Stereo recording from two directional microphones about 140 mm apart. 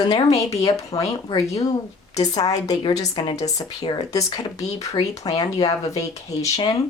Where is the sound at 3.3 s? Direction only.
50° left (ahead or behind).